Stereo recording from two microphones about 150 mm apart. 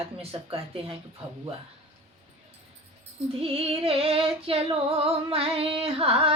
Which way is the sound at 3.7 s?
40° right (ahead or behind).